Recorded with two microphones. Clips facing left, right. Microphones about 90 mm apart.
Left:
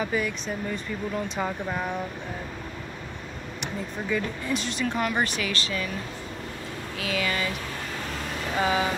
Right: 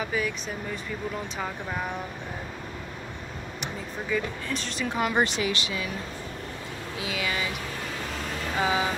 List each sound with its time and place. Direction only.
0.0 s speech: centre (ahead or behind)
3.6 s speech: centre (ahead or behind)
4.8 s speech: 15° right (ahead or behind)
7.0 s speech: 10° right (ahead or behind)
8.5 s speech: 5° right (ahead or behind)